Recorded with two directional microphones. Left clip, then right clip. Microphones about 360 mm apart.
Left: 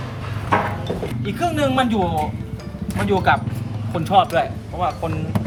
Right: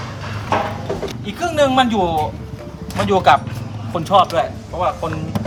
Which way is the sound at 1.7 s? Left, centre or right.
Centre.